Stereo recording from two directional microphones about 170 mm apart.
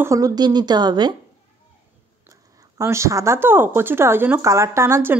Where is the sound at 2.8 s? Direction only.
15° right (ahead or behind).